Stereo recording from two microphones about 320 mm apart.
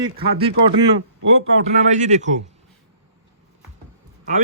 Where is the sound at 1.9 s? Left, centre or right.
Right.